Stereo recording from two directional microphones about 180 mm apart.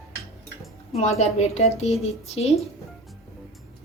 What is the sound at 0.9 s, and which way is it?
A woman's voice, 35° left (ahead or behind).